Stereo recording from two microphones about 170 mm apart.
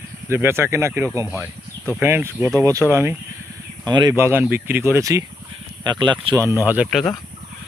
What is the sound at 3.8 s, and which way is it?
Speech, 25° right (ahead or behind).